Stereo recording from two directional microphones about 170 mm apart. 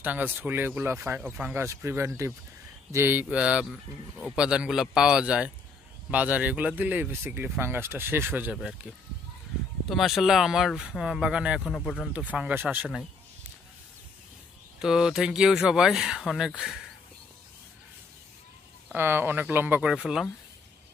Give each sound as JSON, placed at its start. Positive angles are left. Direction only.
{"t": 0.0, "sound": "speech", "side_deg": -10}
{"t": 9.8, "sound": "speech", "side_deg": 0}
{"t": 12.1, "sound": "speech", "side_deg": -5}
{"t": 14.8, "sound": "speech", "side_deg": -5}
{"t": 18.9, "sound": "speech", "side_deg": -15}